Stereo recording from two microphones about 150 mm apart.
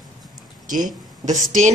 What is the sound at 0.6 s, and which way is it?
Speech, 60° right (ahead or behind).